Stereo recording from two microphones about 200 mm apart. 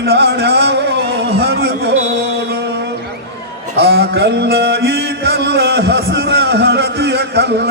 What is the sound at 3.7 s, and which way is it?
Mantra, 55° right (ahead or behind).